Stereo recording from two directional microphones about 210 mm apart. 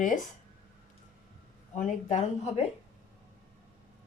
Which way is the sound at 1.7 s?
35° left (ahead or behind).